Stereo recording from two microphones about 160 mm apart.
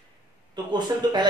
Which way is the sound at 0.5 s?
30° right (ahead or behind).